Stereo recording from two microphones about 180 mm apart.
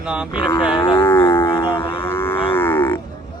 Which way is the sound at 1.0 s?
10° left (ahead or behind).